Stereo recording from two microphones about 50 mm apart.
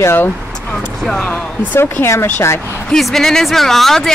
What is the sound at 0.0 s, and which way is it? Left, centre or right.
Speech, left.